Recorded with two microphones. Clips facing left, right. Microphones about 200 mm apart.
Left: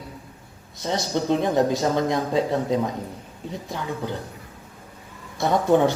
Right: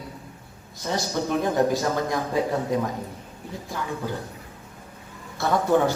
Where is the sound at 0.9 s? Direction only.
20° left (ahead or behind).